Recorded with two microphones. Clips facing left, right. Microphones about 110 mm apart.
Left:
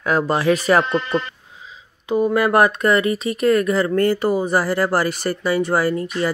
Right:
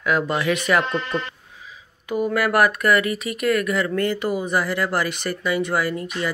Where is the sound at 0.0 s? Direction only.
35° left (ahead or behind).